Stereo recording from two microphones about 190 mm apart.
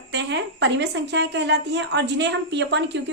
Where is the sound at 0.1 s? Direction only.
65° right (ahead or behind).